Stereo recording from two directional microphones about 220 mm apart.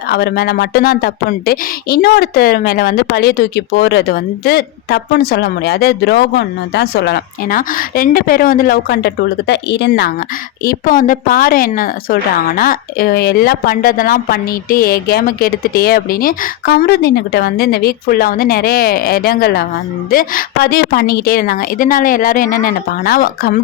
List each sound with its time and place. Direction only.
0.1 s a woman's voice: 50° left (ahead or behind)